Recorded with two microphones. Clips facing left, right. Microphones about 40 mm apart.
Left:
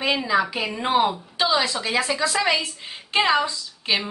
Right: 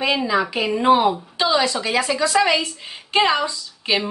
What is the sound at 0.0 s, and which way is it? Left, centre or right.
A woman's voice, centre.